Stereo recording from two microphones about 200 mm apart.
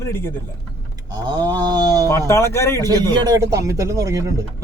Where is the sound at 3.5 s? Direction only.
15° right (ahead or behind).